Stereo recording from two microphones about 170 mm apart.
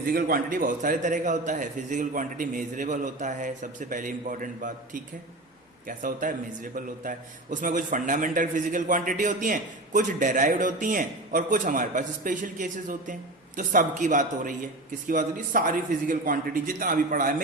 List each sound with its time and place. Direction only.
0.1 s a man's voice: 55° right (ahead or behind)
6.0 s a man's voice: 50° right (ahead or behind)